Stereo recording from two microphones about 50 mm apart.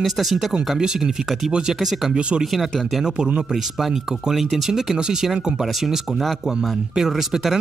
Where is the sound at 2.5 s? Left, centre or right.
Centre.